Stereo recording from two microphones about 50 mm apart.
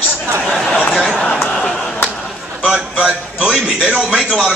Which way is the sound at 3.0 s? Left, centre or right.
Centre.